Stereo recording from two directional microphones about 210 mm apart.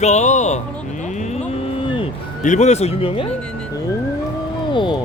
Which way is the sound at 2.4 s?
35° left (ahead or behind).